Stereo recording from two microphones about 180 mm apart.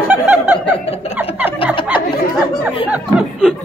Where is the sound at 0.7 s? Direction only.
35° left (ahead or behind).